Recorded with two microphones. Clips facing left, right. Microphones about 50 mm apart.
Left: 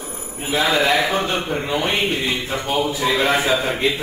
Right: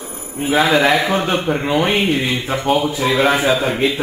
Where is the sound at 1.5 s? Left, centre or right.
Right.